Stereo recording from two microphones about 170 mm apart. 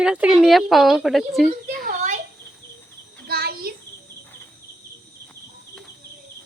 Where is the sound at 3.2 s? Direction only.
65° right (ahead or behind).